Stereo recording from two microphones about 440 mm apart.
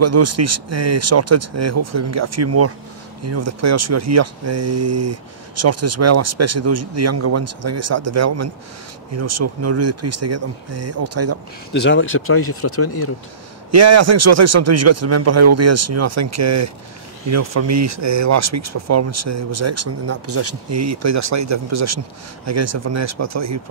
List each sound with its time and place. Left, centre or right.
0.0 s speech: right
11.7 s speech: left
13.7 s speech: right